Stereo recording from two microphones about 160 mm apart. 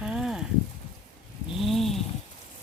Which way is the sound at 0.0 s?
5° right (ahead or behind).